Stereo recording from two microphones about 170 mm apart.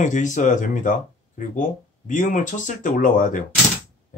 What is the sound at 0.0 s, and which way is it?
Speech, 45° left (ahead or behind).